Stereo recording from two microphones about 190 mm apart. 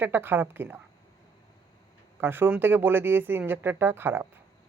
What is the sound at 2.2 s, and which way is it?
Speech, 10° right (ahead or behind).